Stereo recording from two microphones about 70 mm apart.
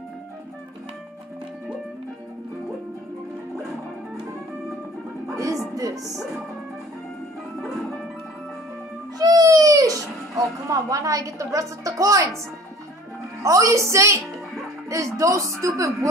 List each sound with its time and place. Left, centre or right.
5.3 s music: right
9.2 s music: right
13.4 s speech: right
14.2 s music: centre
14.9 s speech: right